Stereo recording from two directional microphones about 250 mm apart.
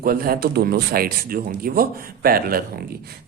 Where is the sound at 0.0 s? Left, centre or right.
Right.